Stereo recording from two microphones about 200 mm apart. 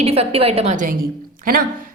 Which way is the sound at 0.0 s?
30° right (ahead or behind).